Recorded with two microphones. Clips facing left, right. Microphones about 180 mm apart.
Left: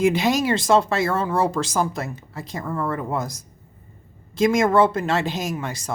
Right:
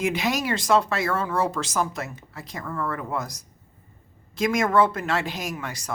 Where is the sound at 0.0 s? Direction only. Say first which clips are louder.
Left 6 dB; 30° left (ahead or behind).